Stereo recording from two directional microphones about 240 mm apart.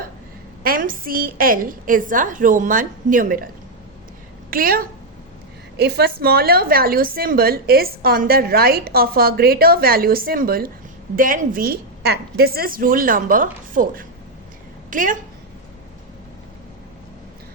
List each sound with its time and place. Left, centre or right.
0.6 s a woman's voice: right
4.5 s a woman's voice: right